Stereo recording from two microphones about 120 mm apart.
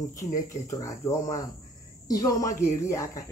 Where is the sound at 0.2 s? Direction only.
25° left (ahead or behind).